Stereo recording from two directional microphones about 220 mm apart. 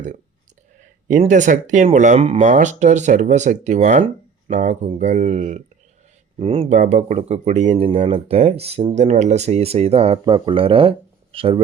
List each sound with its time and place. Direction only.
0.8 s speech: 35° right (ahead or behind)